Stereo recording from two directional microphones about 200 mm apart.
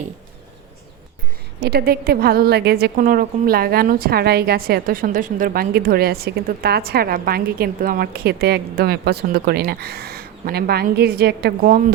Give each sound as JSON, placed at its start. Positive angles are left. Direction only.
{"t": 1.6, "sound": "a woman's voice", "side_deg": -50}